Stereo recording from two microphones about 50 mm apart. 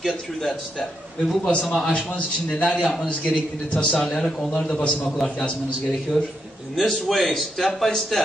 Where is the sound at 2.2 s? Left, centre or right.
Left.